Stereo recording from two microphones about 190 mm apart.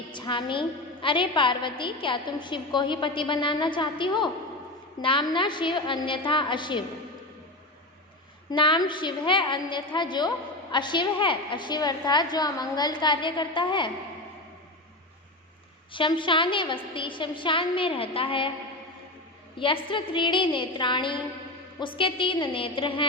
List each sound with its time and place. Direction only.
0.1 s a woman's voice: 25° left (ahead or behind)
8.4 s a woman's voice: 25° left (ahead or behind)
15.9 s a woman's voice: 25° left (ahead or behind)
19.5 s a woman's voice: 25° left (ahead or behind)